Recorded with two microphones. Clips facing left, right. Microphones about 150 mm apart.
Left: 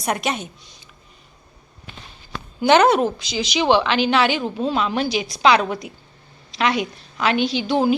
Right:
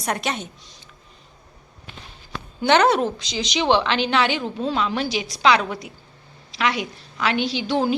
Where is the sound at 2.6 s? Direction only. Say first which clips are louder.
Left 3 dB; 15° left (ahead or behind).